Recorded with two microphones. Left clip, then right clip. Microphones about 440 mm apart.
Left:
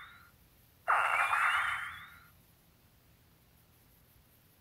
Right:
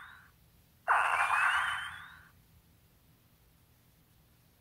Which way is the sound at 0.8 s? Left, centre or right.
Centre.